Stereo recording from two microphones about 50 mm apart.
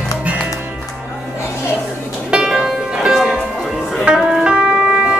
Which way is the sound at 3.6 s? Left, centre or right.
Centre.